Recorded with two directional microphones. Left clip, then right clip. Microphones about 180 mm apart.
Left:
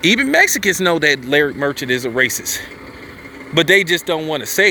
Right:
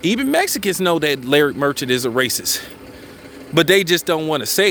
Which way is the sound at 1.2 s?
30° right (ahead or behind).